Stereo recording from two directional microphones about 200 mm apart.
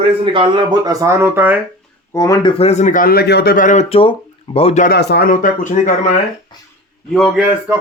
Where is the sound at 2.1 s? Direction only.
15° left (ahead or behind).